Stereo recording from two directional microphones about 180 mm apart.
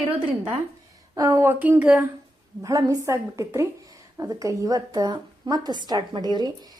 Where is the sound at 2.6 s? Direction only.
20° right (ahead or behind).